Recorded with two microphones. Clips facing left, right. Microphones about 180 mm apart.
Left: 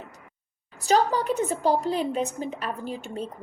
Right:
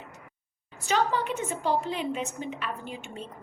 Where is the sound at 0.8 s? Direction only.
40° left (ahead or behind).